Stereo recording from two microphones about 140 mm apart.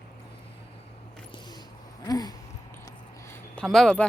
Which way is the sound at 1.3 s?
30° left (ahead or behind).